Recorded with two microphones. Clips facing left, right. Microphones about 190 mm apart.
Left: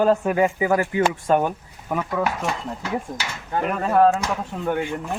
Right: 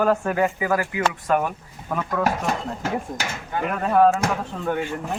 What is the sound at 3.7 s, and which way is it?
Speech, centre (ahead or behind).